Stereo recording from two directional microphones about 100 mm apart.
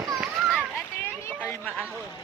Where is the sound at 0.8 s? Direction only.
25° left (ahead or behind).